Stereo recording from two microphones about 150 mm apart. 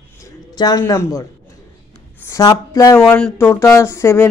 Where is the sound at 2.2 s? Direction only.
25° left (ahead or behind).